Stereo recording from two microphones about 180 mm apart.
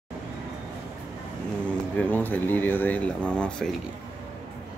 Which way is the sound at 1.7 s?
10° left (ahead or behind).